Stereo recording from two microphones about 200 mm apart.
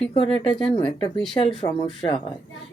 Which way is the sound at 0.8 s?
25° left (ahead or behind).